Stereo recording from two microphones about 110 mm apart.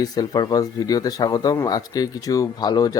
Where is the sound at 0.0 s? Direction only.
35° left (ahead or behind).